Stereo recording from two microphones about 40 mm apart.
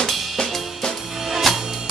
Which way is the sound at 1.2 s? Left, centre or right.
Centre.